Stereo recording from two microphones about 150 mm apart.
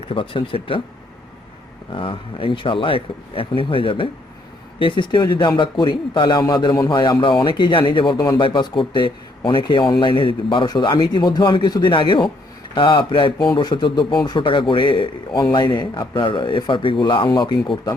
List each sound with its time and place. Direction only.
0.1 s a man's voice: 35° left (ahead or behind)
1.9 s a man's voice: 35° left (ahead or behind)